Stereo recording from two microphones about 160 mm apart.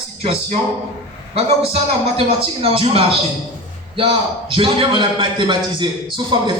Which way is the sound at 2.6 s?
35° right (ahead or behind).